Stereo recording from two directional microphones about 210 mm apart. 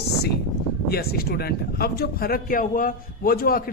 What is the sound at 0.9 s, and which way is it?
Speech, 50° left (ahead or behind).